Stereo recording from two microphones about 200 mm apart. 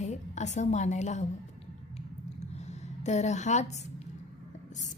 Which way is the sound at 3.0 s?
35° left (ahead or behind).